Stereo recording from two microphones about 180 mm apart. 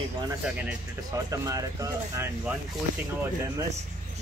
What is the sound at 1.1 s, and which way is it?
Speech, 20° right (ahead or behind).